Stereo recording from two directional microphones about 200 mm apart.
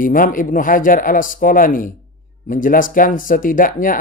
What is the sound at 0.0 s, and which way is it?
Speech, 45° left (ahead or behind).